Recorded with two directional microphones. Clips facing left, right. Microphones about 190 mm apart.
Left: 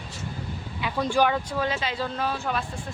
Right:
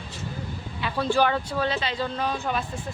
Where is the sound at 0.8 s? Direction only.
15° left (ahead or behind).